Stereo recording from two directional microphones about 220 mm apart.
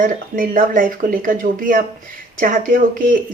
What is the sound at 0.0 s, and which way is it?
A woman's voice, 40° right (ahead or behind).